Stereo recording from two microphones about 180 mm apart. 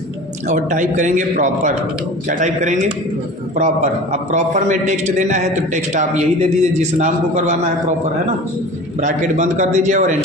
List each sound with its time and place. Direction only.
0.4 s a man's voice: 45° right (ahead or behind)
9.0 s a man's voice: 40° right (ahead or behind)